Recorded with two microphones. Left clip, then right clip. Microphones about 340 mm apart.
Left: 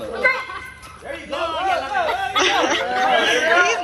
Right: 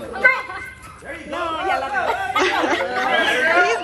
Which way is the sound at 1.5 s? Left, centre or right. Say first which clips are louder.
Left 1 dB; right.